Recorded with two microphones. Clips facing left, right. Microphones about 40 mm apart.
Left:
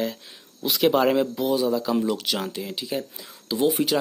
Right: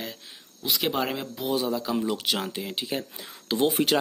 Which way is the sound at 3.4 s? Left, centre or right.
Right.